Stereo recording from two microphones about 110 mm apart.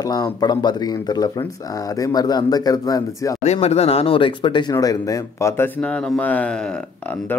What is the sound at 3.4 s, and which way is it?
Speech, 85° left.